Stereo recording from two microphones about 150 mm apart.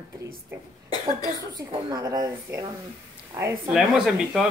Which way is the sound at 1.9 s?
25° right (ahead or behind).